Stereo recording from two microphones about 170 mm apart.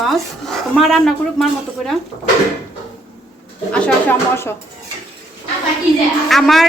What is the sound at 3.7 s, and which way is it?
Speech, 5° left (ahead or behind).